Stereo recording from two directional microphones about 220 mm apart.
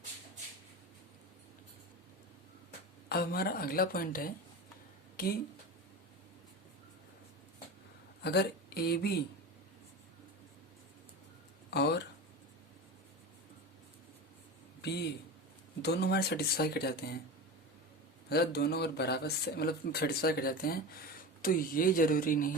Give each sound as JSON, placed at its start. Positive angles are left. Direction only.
{"t": 3.1, "sound": "speech", "side_deg": 45}
{"t": 8.2, "sound": "speech", "side_deg": 50}
{"t": 11.7, "sound": "a sound", "side_deg": 50}
{"t": 14.8, "sound": "a sound", "side_deg": 50}
{"t": 15.8, "sound": "speech", "side_deg": 50}
{"t": 18.3, "sound": "speech", "side_deg": 45}